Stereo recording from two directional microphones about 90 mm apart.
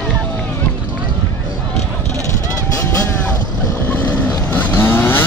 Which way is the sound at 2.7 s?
25° left (ahead or behind).